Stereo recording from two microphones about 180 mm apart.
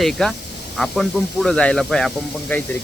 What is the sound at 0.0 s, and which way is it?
Speech, centre (ahead or behind).